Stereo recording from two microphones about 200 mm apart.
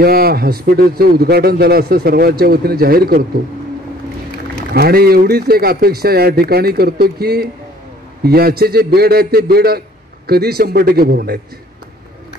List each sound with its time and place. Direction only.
0.0 s a man's voice: 50° right (ahead or behind)
4.7 s a man's voice: 50° right (ahead or behind)